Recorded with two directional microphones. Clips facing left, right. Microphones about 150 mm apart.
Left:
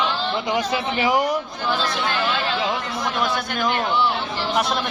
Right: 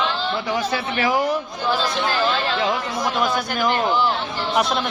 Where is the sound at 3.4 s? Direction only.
Centre (ahead or behind).